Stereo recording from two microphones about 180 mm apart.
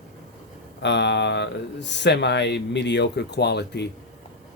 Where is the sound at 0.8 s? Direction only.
75° left (ahead or behind).